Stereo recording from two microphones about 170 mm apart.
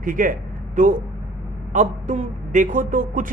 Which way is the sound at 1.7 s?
45° right (ahead or behind).